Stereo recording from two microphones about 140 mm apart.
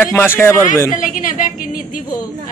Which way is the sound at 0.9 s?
70° left (ahead or behind).